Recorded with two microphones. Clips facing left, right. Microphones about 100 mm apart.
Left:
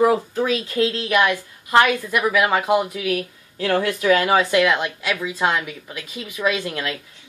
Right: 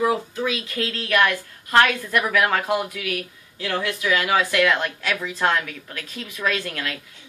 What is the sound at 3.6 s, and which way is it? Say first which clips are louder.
Speech: left 5 dB; 45° left (ahead or behind).